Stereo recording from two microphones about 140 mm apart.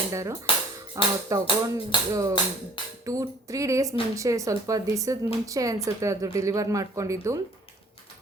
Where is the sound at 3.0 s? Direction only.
25° right (ahead or behind).